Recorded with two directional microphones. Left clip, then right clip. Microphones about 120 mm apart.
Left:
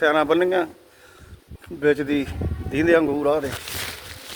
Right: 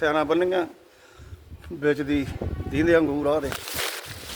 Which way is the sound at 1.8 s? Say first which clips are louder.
Left 3 dB; 10° left (ahead or behind).